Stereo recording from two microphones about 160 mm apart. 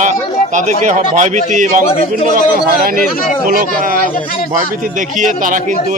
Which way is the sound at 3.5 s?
60° right (ahead or behind).